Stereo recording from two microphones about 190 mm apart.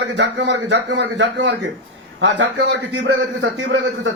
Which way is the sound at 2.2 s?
70° right (ahead or behind).